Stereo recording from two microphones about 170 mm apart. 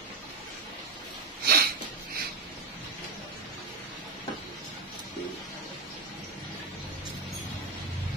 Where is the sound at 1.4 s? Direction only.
65° right (ahead or behind).